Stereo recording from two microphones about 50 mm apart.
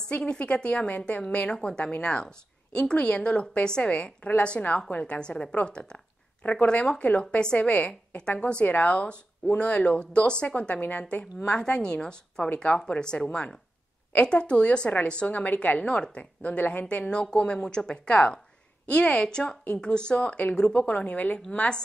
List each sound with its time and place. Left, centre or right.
0.0 s a woman's voice: centre
1.2 s a woman's voice: left
10.8 s a woman's voice: left
15.2 s a woman's voice: left
16.8 s a woman's voice: centre